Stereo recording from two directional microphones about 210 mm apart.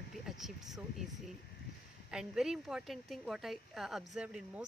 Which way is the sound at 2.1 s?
5° right (ahead or behind).